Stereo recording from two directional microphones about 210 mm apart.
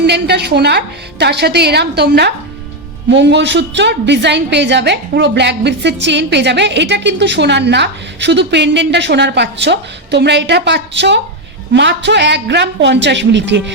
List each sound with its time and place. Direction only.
0.1 s a woman's voice: 50° right (ahead or behind)